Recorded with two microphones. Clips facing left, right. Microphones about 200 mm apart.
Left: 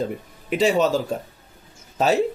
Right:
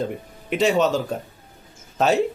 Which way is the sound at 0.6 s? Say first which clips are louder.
Even; 5° left (ahead or behind).